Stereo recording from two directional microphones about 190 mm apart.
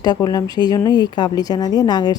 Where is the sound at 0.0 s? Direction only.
20° left (ahead or behind).